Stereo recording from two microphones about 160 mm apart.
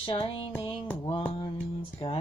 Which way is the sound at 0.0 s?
35° left (ahead or behind).